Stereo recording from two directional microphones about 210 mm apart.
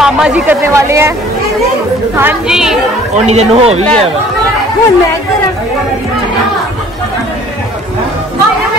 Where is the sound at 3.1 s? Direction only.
30° right (ahead or behind).